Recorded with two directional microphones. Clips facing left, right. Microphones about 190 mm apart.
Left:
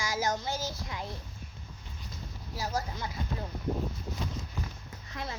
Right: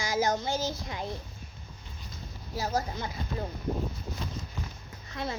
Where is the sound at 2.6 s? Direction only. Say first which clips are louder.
Right 3 dB; 20° right (ahead or behind).